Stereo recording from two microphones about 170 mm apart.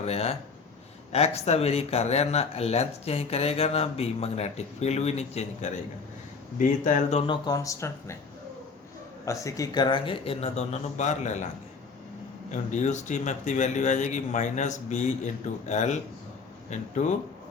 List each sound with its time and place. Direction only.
0.0 s speech: 40° left (ahead or behind)
7.4 s speech: 20° left (ahead or behind)
9.2 s speech: 20° left (ahead or behind); by 11.4 s 45° left (ahead or behind)
12.5 s speech: 45° left (ahead or behind)